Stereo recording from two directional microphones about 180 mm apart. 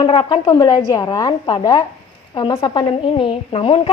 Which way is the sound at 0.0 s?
25° left (ahead or behind).